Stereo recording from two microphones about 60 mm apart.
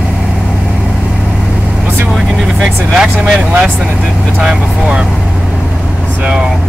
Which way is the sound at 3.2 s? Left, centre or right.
Centre.